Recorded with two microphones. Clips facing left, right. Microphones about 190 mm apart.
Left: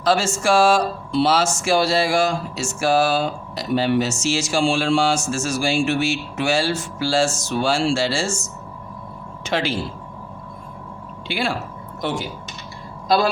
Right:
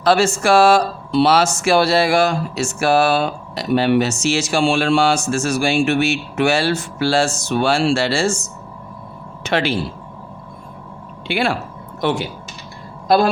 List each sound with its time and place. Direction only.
0.0 s speech: 65° right (ahead or behind)
11.3 s speech: 65° right (ahead or behind)
13.1 s speech: 55° right (ahead or behind)